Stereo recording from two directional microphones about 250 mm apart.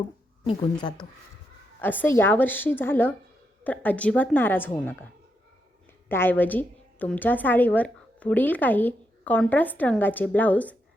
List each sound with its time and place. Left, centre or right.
0.4 s a woman's voice: centre
6.1 s a woman's voice: centre